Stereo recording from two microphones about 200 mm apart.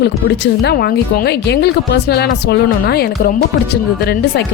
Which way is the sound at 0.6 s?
50° left (ahead or behind).